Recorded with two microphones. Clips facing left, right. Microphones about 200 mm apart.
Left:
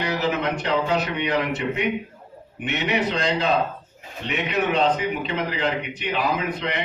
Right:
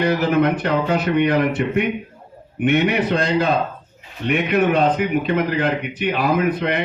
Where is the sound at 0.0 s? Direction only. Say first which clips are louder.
Right 7 dB; 55° right (ahead or behind).